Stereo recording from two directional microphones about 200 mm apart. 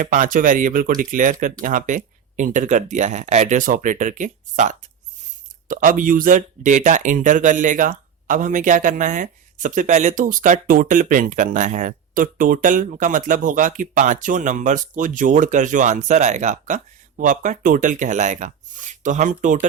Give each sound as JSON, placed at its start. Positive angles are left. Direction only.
{"t": 0.0, "sound": "speech", "side_deg": -40}